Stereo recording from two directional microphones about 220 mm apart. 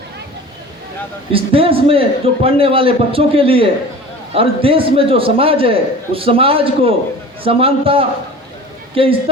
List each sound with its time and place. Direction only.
1.3 s a man's voice: 25° right (ahead or behind)